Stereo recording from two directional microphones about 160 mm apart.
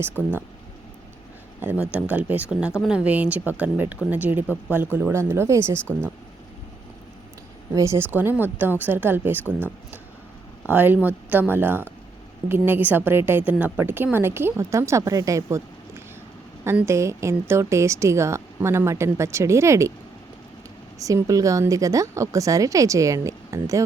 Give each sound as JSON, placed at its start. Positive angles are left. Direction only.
{"t": 1.9, "sound": "a woman's voice", "side_deg": -10}
{"t": 7.7, "sound": "a woman's voice", "side_deg": -20}
{"t": 10.7, "sound": "a woman's voice", "side_deg": -10}
{"t": 16.6, "sound": "a woman's voice", "side_deg": -15}
{"t": 21.0, "sound": "a woman's voice", "side_deg": -20}